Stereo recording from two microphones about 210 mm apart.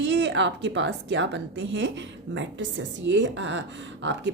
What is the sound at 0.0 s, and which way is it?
Speech, 55° right (ahead or behind).